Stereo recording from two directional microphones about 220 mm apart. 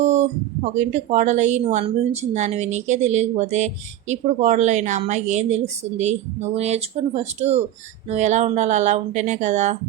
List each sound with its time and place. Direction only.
0.0 s a woman's voice: 30° right (ahead or behind)